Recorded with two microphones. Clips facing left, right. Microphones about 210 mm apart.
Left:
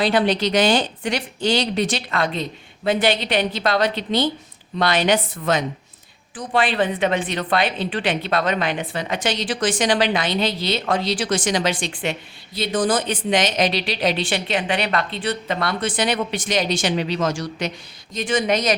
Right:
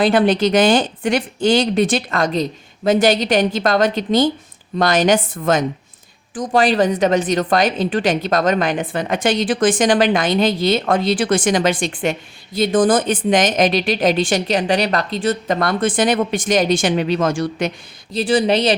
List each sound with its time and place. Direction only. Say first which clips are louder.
0.0 s speech: right 5 dB; 50° right (ahead or behind)
18.1 s a woman's voice: right 5 dB; 35° right (ahead or behind)